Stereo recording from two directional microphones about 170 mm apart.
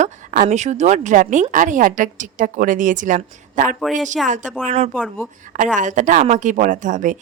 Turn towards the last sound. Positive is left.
turn(degrees=-50)  # may be behind; listen again after turning